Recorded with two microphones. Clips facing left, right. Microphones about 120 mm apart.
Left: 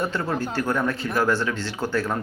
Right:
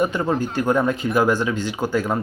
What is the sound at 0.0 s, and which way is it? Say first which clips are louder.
Speech: right 5 dB; 15° right (ahead or behind).